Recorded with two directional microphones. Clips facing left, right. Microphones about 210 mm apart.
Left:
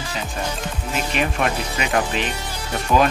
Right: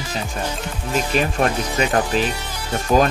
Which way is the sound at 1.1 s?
40° right (ahead or behind).